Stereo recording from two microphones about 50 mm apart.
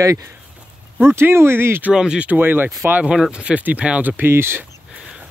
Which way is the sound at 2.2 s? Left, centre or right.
Right.